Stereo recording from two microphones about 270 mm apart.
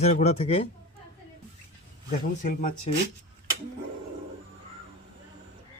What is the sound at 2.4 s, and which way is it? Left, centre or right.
Speech, left.